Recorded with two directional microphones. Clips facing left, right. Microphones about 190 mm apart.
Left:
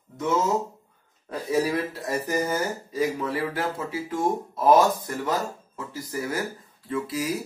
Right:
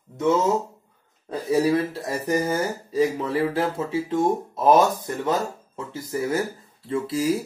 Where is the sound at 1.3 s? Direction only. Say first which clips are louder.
Right 4 dB; 30° right (ahead or behind).